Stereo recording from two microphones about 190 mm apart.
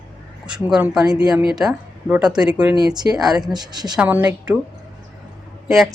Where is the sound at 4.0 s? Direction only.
10° right (ahead or behind).